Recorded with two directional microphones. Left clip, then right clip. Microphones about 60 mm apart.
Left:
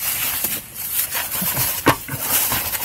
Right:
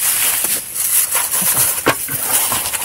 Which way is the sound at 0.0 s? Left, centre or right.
Centre.